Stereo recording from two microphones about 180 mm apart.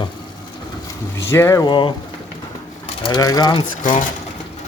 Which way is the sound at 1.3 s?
15° left (ahead or behind).